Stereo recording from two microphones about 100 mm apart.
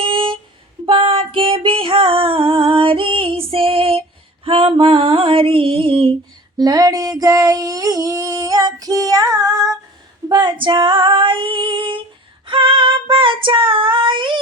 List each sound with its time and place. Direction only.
0.0 s music: 60° right (ahead or behind)
4.4 s female singing: 65° right (ahead or behind)
6.6 s female singing: 40° right (ahead or behind)